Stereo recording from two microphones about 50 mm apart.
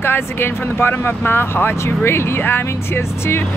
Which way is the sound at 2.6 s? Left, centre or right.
Left.